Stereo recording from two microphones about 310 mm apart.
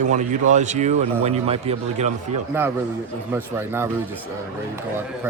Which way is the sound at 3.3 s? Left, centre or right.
Centre.